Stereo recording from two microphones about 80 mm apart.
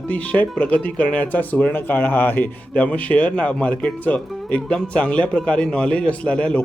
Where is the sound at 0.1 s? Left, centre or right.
Centre.